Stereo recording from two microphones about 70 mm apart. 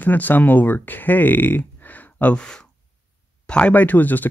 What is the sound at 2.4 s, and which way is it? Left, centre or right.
Speech, centre.